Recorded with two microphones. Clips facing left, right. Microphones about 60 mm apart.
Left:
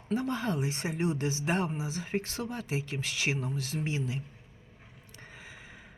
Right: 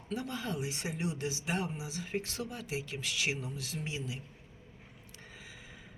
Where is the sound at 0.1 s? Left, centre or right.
Left.